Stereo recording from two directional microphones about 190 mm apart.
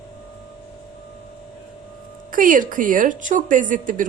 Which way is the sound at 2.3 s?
45° right (ahead or behind).